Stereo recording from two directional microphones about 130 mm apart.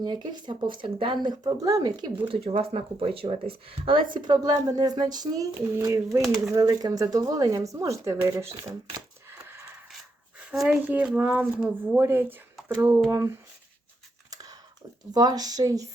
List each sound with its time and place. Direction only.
0.0 s speech: 35° right (ahead or behind)
2.2 s speech: 45° right (ahead or behind); by 6.2 s 25° right (ahead or behind)
6.2 s speech: centre (ahead or behind)
6.5 s speech: 30° right (ahead or behind)
10.7 s speech: 10° right (ahead or behind)
15.1 s speech: 30° right (ahead or behind)